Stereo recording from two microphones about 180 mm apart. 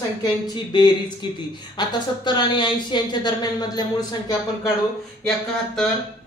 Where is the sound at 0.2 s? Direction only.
25° left (ahead or behind).